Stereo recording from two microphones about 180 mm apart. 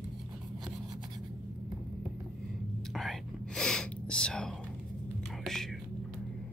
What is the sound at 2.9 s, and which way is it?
Whispering, 5° left (ahead or behind).